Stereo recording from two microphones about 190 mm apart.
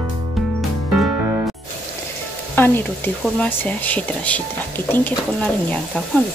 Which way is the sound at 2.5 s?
10° left (ahead or behind).